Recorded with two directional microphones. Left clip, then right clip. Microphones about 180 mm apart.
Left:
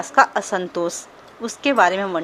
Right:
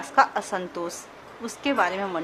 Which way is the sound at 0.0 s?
30° left (ahead or behind).